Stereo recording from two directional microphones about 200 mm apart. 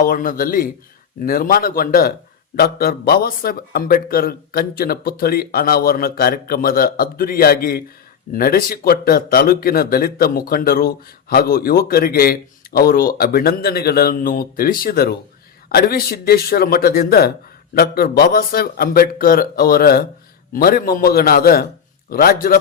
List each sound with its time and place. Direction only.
0.0 s speech: 45° left (ahead or behind)